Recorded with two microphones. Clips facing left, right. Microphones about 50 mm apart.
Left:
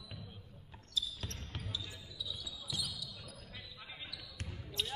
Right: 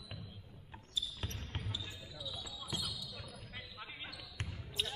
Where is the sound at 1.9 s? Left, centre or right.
Right.